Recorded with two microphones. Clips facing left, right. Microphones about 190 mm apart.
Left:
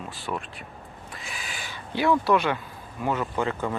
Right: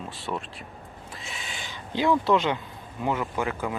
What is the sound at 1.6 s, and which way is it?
Speech, 20° right (ahead or behind).